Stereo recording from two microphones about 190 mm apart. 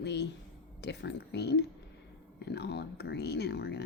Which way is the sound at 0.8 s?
65° left (ahead or behind).